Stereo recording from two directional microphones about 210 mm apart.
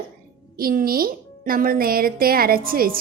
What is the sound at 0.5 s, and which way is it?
Speech, 45° right (ahead or behind).